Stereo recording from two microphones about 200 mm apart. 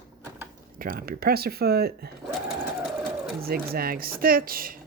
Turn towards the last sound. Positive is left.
turn(degrees=-45)  # may be behind; listen again after turning